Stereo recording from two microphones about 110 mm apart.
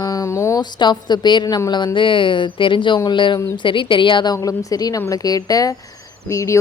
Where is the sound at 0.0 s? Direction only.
30° left (ahead or behind).